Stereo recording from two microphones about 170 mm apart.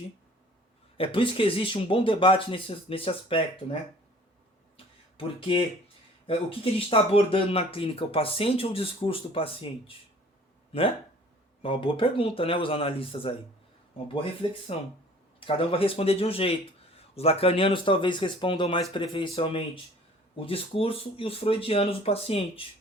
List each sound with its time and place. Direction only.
0.9 s speech: 30° left (ahead or behind)
5.1 s speech: 30° left (ahead or behind)
14.4 s speech: 30° left (ahead or behind)